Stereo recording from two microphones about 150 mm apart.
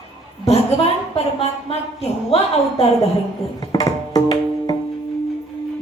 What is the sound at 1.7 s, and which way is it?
Speech, 40° left (ahead or behind).